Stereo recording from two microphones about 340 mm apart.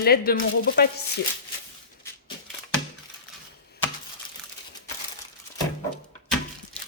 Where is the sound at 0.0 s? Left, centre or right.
Left.